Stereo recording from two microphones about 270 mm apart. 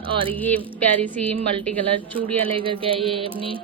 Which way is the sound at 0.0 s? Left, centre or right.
Centre.